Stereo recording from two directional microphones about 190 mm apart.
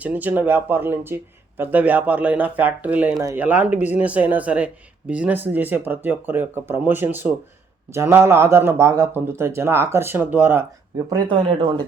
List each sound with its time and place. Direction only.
0.0 s speech: 10° right (ahead or behind)
11.3 s speech: 25° right (ahead or behind)